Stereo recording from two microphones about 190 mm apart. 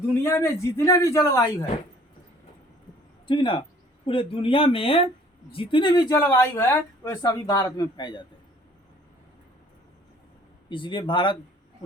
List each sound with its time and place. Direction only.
0.2 s a man's voice: 15° left (ahead or behind)
3.2 s speech: 25° left (ahead or behind)
10.7 s speech: 25° left (ahead or behind)